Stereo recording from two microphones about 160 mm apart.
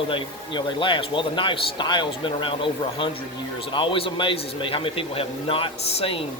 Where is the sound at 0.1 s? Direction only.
30° left (ahead or behind).